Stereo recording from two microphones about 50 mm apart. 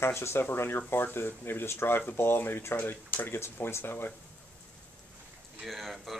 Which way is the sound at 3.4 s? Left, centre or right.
Left.